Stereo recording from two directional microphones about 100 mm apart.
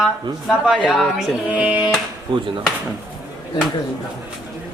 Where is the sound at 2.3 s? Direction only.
65° right (ahead or behind).